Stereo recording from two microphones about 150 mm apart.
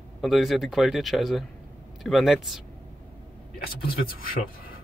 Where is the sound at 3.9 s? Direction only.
75° left (ahead or behind).